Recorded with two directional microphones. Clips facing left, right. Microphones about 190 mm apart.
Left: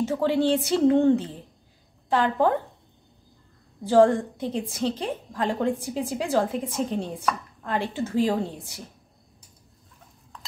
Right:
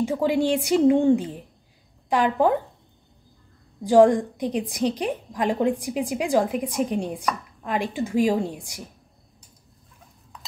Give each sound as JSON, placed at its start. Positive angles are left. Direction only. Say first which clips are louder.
{"t": 0.0, "sound": "a woman's voice", "louder": "right 1 dB", "side_deg": -15}
{"t": 3.8, "sound": "a woman's voice", "louder": "right 2 dB", "side_deg": -15}